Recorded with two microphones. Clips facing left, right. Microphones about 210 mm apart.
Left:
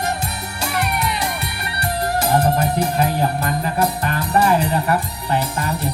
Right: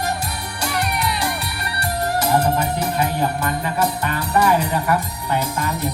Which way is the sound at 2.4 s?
35° left (ahead or behind).